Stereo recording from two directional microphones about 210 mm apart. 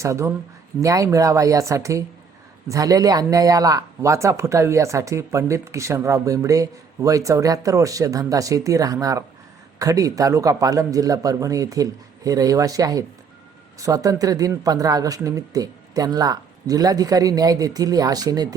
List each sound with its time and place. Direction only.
0.0 s speech: 15° right (ahead or behind)